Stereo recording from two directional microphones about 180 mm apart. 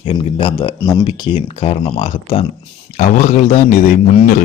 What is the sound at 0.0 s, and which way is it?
A man's voice, 30° left (ahead or behind).